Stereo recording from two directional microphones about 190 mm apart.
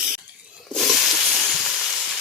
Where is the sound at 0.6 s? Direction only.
Centre (ahead or behind).